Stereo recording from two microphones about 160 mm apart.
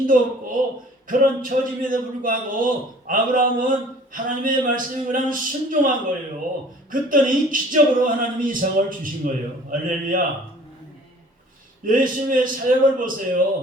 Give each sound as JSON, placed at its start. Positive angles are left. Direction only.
{"t": 0.1, "sound": "a man's voice", "side_deg": -55}
{"t": 11.9, "sound": "a man's voice", "side_deg": -60}